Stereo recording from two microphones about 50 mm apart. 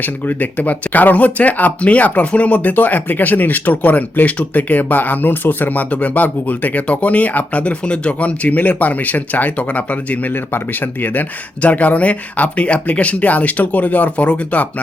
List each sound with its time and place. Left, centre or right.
0.0 s speech: left